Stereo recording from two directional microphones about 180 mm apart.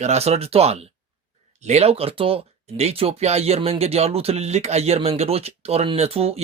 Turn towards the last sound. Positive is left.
turn(degrees=-35)  # may be behind; listen again after turning